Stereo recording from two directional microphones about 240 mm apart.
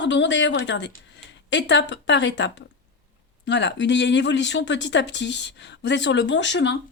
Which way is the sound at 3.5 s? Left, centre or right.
Left.